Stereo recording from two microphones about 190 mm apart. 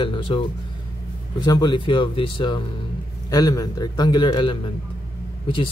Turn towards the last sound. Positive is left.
turn(degrees=25)  # may be behind; listen again after turning